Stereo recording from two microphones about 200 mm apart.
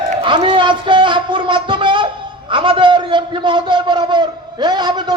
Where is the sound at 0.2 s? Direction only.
25° right (ahead or behind).